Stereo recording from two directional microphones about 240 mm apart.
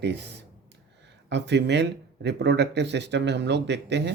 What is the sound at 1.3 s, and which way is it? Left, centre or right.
Speech, right.